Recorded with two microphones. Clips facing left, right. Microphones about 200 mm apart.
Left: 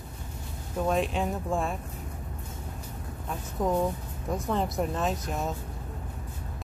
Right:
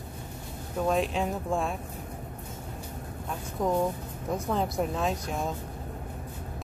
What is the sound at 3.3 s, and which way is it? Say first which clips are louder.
Speech: even; centre (ahead or behind).